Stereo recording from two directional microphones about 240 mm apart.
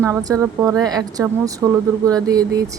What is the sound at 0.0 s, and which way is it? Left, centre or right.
Speech, centre.